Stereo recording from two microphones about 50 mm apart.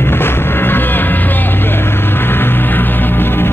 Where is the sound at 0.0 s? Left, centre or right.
Left.